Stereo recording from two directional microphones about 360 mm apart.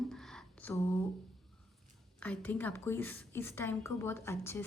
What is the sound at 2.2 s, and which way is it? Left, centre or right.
A woman's voice, centre.